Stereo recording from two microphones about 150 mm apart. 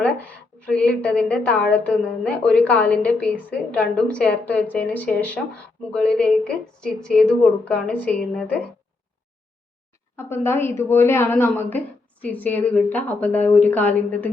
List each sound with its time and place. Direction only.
0.0 s a woman's voice: 10° left (ahead or behind)
10.2 s a woman's voice: 15° left (ahead or behind)